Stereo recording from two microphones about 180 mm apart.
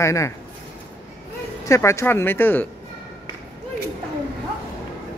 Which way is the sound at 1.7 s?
15° left (ahead or behind).